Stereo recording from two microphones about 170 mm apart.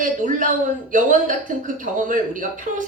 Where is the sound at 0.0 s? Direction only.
50° right (ahead or behind).